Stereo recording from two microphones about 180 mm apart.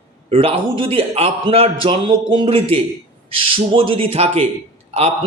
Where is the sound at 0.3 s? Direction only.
30° right (ahead or behind).